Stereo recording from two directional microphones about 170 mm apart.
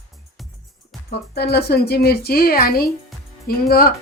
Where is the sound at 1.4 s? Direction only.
70° left (ahead or behind).